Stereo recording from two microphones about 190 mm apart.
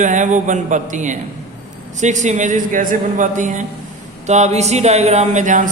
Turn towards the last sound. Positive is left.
turn(degrees=-40)  # may be behind; listen again after turning